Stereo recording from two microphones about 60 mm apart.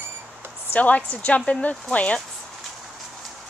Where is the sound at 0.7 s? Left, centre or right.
Left.